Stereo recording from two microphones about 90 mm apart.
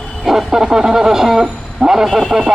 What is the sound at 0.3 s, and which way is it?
A man's voice, 5° right (ahead or behind).